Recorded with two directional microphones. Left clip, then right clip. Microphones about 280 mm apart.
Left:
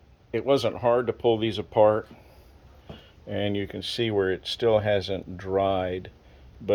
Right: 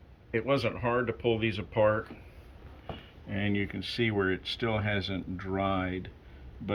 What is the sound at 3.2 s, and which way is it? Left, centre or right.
Speech, centre.